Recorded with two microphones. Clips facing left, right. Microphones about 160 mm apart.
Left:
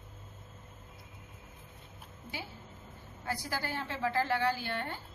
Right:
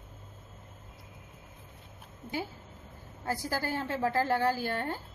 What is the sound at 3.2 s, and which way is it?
A woman's voice, 45° right (ahead or behind).